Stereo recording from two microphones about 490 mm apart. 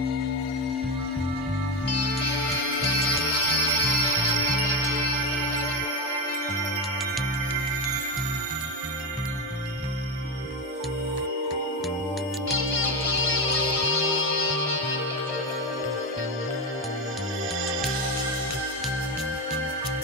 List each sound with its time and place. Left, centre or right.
2.2 s music: right
12.4 s music: right